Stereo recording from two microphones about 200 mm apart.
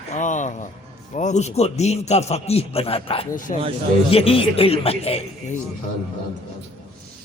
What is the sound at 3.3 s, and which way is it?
Speech, 40° left (ahead or behind).